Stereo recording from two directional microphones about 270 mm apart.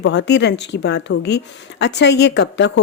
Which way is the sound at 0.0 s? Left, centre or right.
Left.